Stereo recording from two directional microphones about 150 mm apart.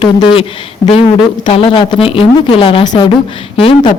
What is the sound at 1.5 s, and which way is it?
Speech, 35° left (ahead or behind).